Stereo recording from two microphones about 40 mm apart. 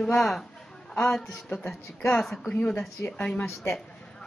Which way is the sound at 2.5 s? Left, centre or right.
Left.